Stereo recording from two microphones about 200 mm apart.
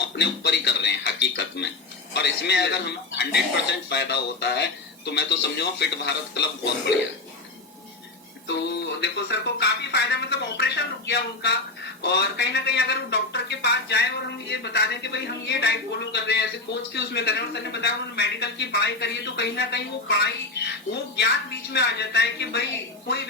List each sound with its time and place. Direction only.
0.0 s speech: 55° left (ahead or behind)
8.4 s speech: 60° left (ahead or behind)